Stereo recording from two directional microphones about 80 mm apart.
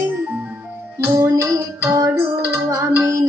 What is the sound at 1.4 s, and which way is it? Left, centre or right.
Music, right.